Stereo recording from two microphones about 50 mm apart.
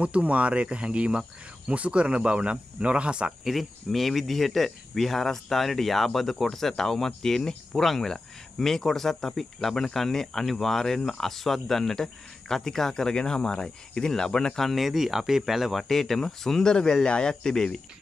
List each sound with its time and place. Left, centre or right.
0.0 s speech: right
3.4 s speech: centre